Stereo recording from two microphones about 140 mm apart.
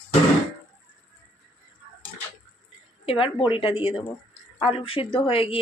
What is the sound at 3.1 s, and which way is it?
Speech, 40° left (ahead or behind).